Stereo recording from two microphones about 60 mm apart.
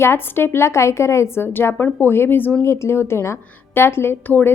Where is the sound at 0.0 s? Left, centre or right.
Left.